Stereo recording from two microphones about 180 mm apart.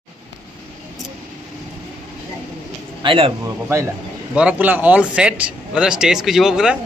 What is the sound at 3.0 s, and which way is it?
Speech, 30° right (ahead or behind).